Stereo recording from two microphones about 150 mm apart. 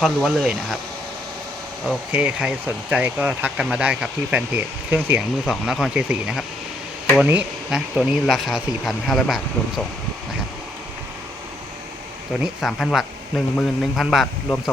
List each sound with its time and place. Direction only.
0.0 s speech: centre (ahead or behind)
1.8 s speech: 5° right (ahead or behind)
12.3 s speech: centre (ahead or behind)